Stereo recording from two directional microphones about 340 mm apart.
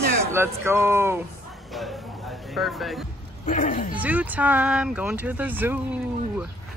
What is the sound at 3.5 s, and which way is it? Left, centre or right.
Speech, left.